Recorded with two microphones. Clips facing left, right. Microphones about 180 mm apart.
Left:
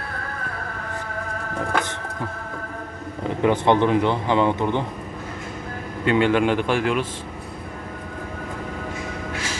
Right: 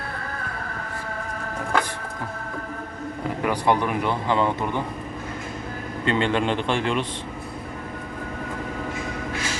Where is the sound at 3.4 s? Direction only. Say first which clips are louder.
Left 5 dB; 25° left (ahead or behind).